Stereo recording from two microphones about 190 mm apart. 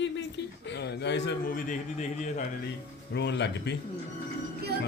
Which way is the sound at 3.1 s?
65° left (ahead or behind).